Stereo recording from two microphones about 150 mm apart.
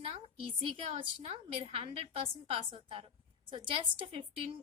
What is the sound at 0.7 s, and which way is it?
Speech, 40° right (ahead or behind).